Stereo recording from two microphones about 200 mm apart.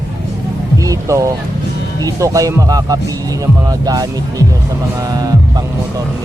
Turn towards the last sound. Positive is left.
turn(degrees=-20)  # may be behind; listen again after turning